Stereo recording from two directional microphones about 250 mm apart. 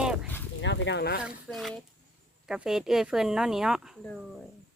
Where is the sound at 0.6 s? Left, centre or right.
Left.